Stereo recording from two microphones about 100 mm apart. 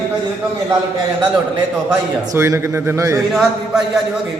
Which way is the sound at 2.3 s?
30° right (ahead or behind).